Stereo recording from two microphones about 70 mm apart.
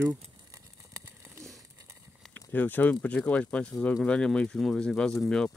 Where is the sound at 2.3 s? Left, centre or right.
Left.